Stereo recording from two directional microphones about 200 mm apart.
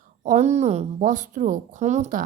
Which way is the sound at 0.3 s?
35° right (ahead or behind).